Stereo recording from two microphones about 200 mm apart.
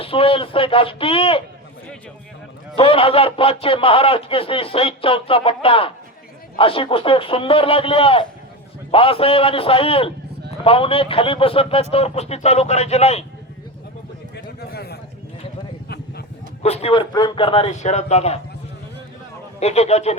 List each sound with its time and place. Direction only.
0.0 s speech: 25° left (ahead or behind)
2.7 s speech: 25° left (ahead or behind)
14.3 s a sound: 55° left (ahead or behind)
16.6 s speech: 30° left (ahead or behind)
19.5 s speech: 30° left (ahead or behind)